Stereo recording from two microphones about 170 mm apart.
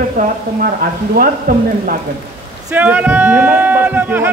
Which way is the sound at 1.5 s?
55° right (ahead or behind).